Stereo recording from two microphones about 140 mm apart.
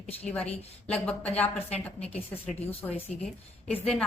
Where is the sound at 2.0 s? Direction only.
50° left (ahead or behind).